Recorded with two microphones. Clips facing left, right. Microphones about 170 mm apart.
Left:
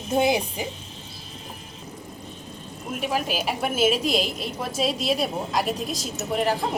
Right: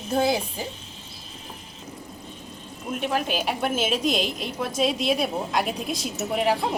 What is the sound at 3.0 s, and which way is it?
A woman's voice, 5° left (ahead or behind).